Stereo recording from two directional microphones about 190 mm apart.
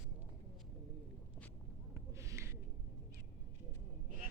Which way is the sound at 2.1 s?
15° right (ahead or behind).